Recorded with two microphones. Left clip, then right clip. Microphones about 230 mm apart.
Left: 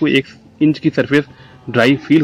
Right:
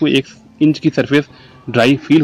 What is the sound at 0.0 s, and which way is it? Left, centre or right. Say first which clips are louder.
Speech: even; centre.